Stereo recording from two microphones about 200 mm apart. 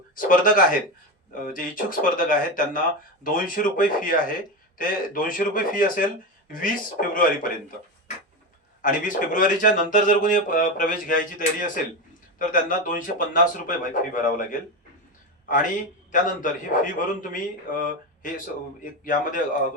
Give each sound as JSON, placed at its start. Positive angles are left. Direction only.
{"t": 0.2, "sound": "a man's voice", "side_deg": 45}
{"t": 8.8, "sound": "a man's voice", "side_deg": 40}
{"t": 16.2, "sound": "a man's voice", "side_deg": 40}